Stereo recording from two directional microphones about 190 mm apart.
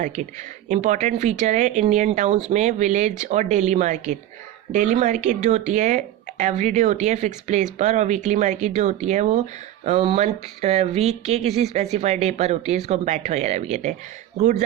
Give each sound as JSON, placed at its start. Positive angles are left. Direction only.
{"t": 0.2, "sound": "speech", "side_deg": -40}